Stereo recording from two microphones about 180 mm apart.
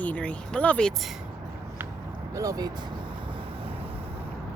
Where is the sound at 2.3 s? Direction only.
20° right (ahead or behind).